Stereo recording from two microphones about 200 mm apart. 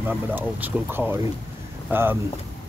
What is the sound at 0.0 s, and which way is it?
Speech, 10° right (ahead or behind).